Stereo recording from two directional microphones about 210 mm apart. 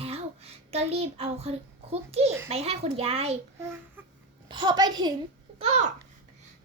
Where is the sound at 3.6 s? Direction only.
10° right (ahead or behind).